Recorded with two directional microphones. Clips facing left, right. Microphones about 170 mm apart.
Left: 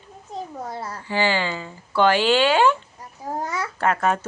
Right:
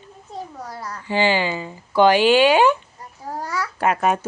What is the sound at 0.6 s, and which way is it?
Speech, 25° left (ahead or behind).